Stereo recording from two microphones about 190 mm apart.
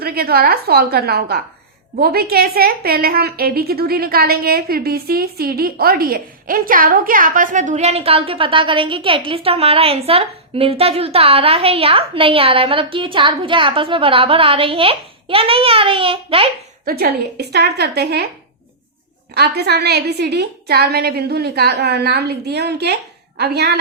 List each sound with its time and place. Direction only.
0.0 s a woman's voice: 55° right (ahead or behind); by 16.5 s 30° right (ahead or behind)
16.8 s a woman's voice: 55° right (ahead or behind)
19.3 s a woman's voice: 60° right (ahead or behind)